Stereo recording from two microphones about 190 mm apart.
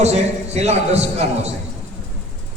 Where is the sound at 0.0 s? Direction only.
35° right (ahead or behind).